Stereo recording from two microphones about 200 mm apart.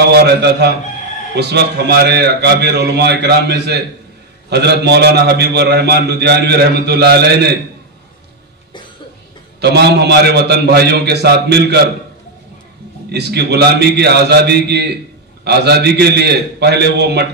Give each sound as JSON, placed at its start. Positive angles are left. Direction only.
{"t": 0.1, "sound": "a man's voice", "side_deg": -55}
{"t": 9.6, "sound": "a man's voice", "side_deg": -55}
{"t": 13.1, "sound": "a man's voice", "side_deg": -55}